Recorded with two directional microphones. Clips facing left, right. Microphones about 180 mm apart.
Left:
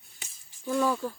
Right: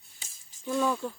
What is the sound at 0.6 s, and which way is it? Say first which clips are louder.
Speech: left 1 dB; centre (ahead or behind).